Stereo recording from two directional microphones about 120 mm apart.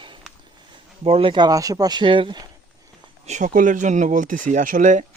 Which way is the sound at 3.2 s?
80° right.